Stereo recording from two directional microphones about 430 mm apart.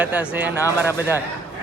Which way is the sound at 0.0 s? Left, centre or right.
Centre.